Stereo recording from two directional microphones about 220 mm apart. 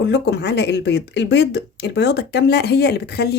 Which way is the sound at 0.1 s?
50° left (ahead or behind).